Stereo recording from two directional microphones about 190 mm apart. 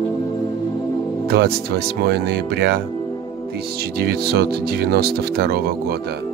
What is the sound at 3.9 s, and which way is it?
Speech, 55° right (ahead or behind).